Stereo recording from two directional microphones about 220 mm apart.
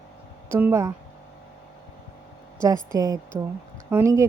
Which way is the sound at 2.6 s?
15° right (ahead or behind).